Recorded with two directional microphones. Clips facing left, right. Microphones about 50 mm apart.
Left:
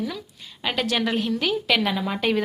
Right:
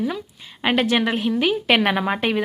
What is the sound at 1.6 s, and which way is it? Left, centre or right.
Speech, right.